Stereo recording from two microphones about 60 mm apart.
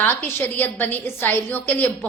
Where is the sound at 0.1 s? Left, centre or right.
Left.